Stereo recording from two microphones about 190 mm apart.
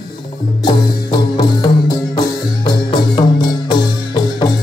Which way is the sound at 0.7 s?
25° left (ahead or behind).